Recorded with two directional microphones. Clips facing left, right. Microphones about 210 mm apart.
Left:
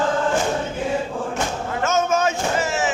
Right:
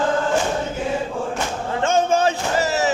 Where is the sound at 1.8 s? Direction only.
30° right (ahead or behind).